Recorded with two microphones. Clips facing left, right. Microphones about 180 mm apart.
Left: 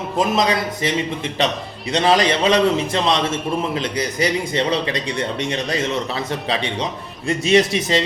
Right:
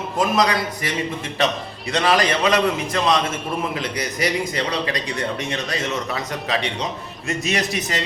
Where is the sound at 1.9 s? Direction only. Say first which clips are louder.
Left 2 dB; 25° left (ahead or behind).